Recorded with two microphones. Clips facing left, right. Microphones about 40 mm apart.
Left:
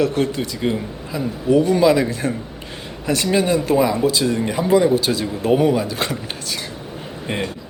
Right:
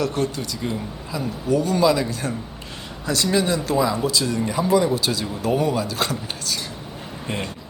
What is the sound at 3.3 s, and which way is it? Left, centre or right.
A woman's voice, left.